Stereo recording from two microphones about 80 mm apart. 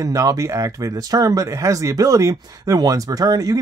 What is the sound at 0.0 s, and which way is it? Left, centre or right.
Speech, right.